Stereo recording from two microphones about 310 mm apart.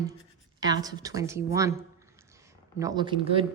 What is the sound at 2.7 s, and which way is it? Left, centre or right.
Speech, centre.